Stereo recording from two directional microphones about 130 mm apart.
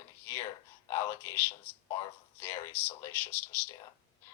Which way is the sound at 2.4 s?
20° left (ahead or behind).